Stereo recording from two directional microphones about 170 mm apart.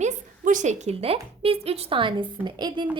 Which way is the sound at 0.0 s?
45° right (ahead or behind).